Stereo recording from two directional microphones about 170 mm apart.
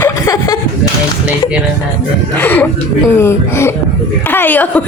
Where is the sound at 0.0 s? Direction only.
20° left (ahead or behind).